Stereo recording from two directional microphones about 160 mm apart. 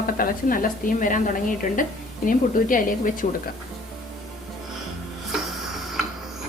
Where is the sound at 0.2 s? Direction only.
60° left (ahead or behind).